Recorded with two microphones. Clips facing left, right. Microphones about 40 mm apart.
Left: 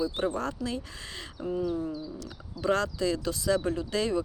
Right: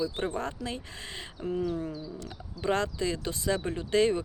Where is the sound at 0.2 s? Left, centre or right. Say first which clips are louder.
Left 2 dB; right.